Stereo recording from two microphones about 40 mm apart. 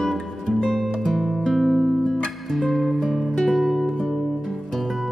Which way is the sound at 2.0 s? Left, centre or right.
Left.